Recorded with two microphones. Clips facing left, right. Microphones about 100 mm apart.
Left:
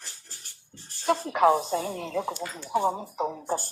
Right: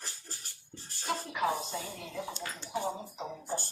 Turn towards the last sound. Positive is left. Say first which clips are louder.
# left 9 dB
turn(degrees=55)  # may be behind; listen again after turning